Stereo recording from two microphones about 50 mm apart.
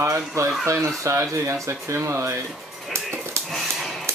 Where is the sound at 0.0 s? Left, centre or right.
Right.